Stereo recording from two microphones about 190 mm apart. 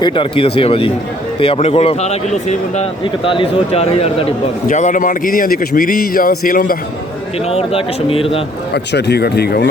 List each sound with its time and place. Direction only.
0.0 s a man's voice: 25° left (ahead or behind); by 6.7 s 45° left (ahead or behind)
7.4 s speech: 30° left (ahead or behind)
8.7 s speech: 60° left (ahead or behind)